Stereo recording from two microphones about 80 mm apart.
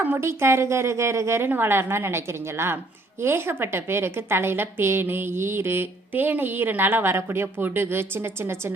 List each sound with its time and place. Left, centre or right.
0.2 s a woman's voice: right